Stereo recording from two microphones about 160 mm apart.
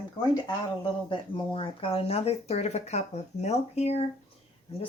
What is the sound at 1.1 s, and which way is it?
Speech, 30° left (ahead or behind).